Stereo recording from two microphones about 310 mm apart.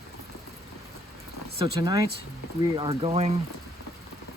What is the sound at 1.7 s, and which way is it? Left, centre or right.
Speech, centre.